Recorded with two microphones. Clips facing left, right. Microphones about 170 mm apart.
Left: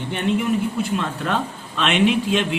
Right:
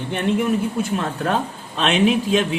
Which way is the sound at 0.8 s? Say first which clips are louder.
Right 1 dB; 45° right (ahead or behind).